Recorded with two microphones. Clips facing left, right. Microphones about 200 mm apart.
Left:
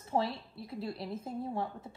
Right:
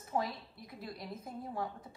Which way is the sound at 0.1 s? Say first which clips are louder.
Left 4 dB; 30° left (ahead or behind).